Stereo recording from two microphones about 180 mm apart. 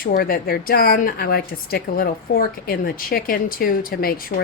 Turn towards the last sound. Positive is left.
turn(degrees=55)  # may be behind; listen again after turning